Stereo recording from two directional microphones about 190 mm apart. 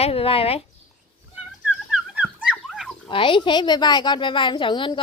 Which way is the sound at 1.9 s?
5° right (ahead or behind).